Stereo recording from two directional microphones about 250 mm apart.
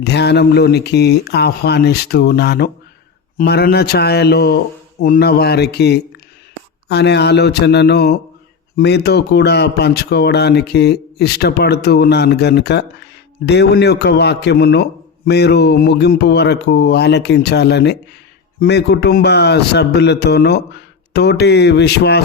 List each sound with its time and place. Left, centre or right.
0.0 s speech: left